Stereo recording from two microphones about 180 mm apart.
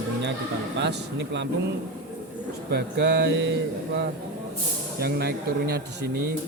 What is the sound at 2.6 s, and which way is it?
Speech, 65° right (ahead or behind).